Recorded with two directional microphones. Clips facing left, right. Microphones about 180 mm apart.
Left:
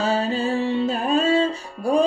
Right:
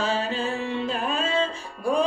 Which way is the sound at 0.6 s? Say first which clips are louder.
Left 5 dB; 35° left (ahead or behind).